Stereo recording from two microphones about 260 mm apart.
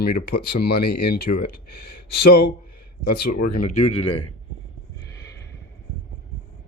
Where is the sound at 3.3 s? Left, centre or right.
Left.